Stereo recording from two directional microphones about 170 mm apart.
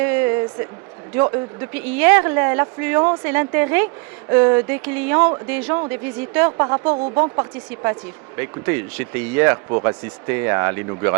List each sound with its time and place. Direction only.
0.0 s a sound: 15° right (ahead or behind)
1.7 s speech: 10° right (ahead or behind)
6.9 s speech: 35° right (ahead or behind)
7.2 s speech: 20° right (ahead or behind)